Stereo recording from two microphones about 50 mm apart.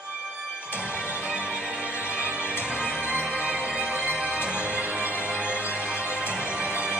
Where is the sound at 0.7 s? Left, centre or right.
Right.